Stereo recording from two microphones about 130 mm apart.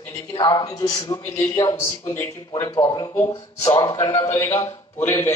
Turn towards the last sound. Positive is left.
turn(degrees=20)  # may be behind; listen again after turning